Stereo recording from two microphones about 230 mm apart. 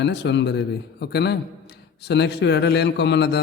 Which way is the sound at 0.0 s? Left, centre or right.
Left.